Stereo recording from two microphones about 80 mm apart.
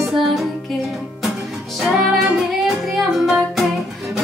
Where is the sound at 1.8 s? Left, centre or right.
Centre.